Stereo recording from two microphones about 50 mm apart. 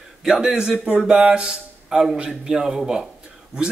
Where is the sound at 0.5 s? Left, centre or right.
Centre.